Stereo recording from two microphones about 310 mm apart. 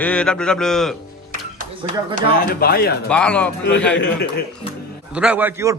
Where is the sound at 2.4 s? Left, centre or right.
Left.